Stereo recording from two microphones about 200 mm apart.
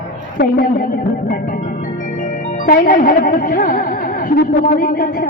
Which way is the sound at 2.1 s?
40° left (ahead or behind).